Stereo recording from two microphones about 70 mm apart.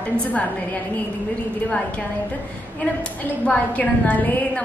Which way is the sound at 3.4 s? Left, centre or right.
Left.